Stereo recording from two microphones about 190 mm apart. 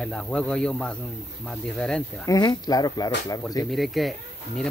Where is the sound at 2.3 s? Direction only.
20° left (ahead or behind).